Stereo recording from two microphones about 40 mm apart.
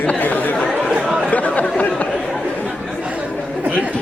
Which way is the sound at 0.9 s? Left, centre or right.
Centre.